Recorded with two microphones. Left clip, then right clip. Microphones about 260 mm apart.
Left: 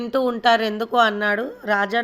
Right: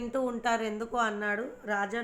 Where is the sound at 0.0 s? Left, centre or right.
Left.